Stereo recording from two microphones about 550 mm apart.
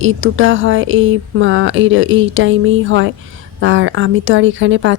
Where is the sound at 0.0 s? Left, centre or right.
Right.